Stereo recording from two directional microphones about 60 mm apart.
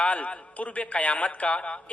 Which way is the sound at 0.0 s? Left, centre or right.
Left.